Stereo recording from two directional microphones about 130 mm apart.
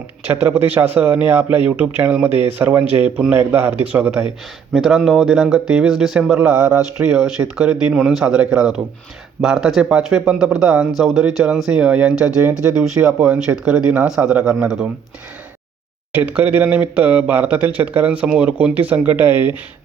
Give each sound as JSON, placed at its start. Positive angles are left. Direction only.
{"t": 0.3, "sound": "speech", "side_deg": -20}
{"t": 4.7, "sound": "speech", "side_deg": -5}
{"t": 16.1, "sound": "speech", "side_deg": -15}